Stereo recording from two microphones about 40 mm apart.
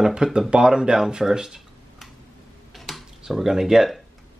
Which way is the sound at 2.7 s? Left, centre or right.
Centre.